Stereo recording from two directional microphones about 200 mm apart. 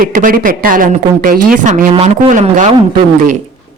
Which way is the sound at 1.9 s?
30° right (ahead or behind).